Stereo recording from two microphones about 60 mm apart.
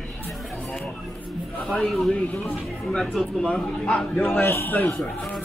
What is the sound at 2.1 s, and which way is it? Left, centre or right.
Speech, left.